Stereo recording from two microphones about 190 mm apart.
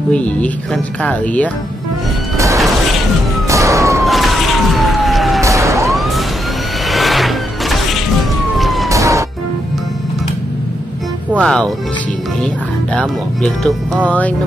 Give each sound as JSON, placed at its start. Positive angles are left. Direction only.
{"t": 0.1, "sound": "speech", "side_deg": 5}
{"t": 2.3, "sound": "music", "side_deg": -15}
{"t": 3.4, "sound": "police car", "side_deg": -15}
{"t": 4.0, "sound": "police car", "side_deg": 0}
{"t": 5.4, "sound": "police car", "side_deg": -15}
{"t": 5.9, "sound": "emergency vehicle", "side_deg": 0}
{"t": 6.9, "sound": "vehicle", "side_deg": 0}
{"t": 8.5, "sound": "police car", "side_deg": 0}
{"t": 8.8, "sound": "police car", "side_deg": -15}
{"t": 11.3, "sound": "speech", "side_deg": 5}
{"t": 12.9, "sound": "speech", "side_deg": 0}